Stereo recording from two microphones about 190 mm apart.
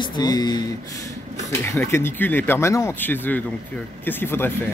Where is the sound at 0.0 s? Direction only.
25° left (ahead or behind).